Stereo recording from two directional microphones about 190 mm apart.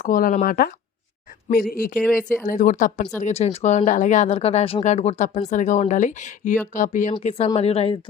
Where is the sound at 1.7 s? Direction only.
50° left (ahead or behind).